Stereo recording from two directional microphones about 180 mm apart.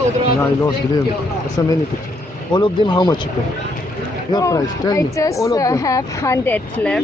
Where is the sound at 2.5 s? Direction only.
25° left (ahead or behind).